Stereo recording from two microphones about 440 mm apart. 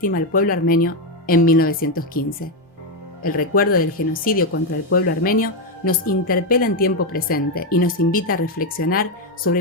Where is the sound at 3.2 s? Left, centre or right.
Centre.